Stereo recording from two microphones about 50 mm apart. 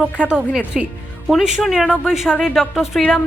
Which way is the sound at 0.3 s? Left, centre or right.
Centre.